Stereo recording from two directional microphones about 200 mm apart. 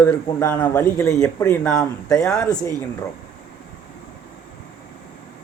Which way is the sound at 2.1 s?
15° left (ahead or behind).